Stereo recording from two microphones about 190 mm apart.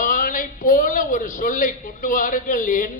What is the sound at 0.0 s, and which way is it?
A man's voice, 45° left (ahead or behind).